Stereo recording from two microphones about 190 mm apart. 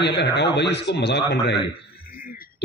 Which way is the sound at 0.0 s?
65° left (ahead or behind).